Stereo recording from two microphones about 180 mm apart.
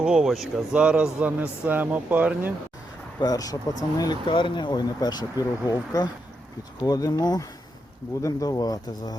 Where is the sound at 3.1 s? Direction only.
20° left (ahead or behind).